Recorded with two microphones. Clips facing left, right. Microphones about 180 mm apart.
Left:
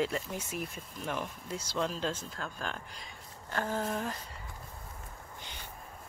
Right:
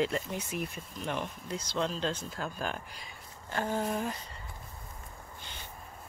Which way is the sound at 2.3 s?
10° right (ahead or behind).